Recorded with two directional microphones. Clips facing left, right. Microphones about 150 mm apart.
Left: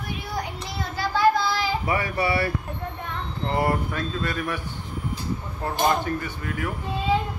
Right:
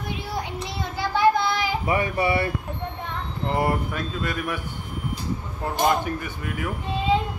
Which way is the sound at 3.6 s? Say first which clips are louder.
Even; 15° right (ahead or behind).